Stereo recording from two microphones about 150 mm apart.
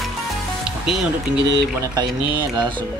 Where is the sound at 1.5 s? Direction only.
25° right (ahead or behind).